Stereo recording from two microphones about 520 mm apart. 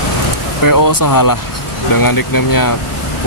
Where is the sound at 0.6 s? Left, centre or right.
Left.